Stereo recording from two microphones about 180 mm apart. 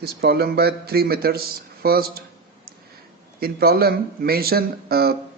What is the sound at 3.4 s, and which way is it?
Speech, 60° right (ahead or behind).